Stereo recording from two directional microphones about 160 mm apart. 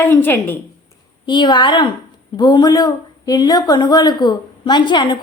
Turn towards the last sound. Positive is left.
turn(degrees=30)  # may be behind; listen again after turning